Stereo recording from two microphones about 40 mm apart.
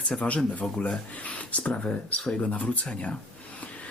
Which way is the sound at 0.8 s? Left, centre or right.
Left.